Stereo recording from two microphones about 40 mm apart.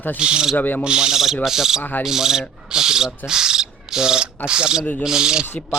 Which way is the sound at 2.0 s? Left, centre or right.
Centre.